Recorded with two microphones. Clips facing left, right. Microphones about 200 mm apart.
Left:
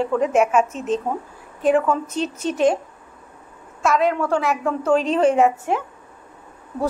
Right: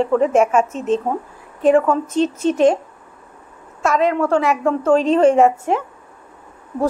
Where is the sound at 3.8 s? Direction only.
5° left (ahead or behind).